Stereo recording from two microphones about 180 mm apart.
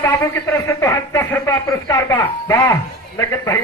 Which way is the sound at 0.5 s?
15° left (ahead or behind).